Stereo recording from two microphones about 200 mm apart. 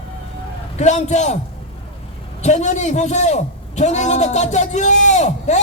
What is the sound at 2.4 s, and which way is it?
A man's voice, 35° left (ahead or behind).